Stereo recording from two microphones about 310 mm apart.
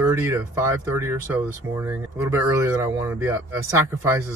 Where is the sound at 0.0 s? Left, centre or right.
Centre.